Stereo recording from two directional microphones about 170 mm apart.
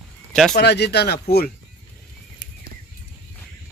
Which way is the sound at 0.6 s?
75° left (ahead or behind).